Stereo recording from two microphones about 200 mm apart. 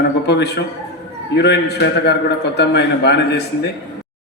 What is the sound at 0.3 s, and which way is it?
A man's voice, 55° left (ahead or behind).